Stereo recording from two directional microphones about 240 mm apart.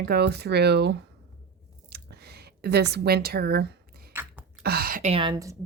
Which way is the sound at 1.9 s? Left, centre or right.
Right.